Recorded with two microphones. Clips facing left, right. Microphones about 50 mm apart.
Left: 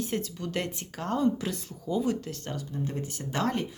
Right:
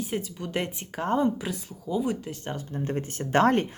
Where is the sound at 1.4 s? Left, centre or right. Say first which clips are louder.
Even; centre.